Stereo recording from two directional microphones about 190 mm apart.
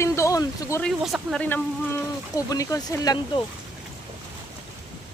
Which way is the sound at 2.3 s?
20° left (ahead or behind).